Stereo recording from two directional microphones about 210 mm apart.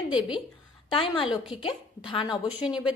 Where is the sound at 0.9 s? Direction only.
25° left (ahead or behind).